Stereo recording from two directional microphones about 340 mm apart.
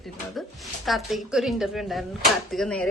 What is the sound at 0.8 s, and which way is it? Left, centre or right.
A woman's voice, centre.